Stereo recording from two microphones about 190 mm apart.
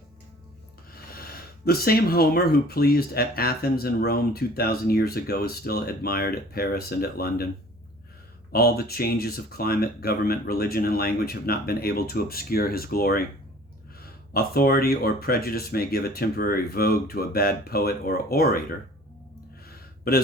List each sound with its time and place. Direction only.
0.9 s speech: 50° left (ahead or behind)
8.5 s speech: 55° left (ahead or behind)
19.6 s a sound: 55° left (ahead or behind)